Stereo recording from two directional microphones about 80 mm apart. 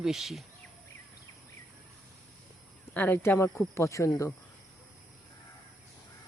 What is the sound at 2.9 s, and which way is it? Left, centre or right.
Speech, left.